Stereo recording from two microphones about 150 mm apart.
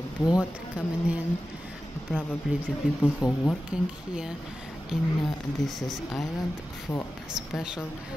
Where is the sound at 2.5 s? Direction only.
Centre (ahead or behind).